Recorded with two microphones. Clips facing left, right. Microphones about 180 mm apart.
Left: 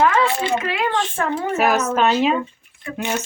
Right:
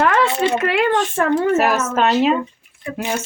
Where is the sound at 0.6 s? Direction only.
65° right (ahead or behind).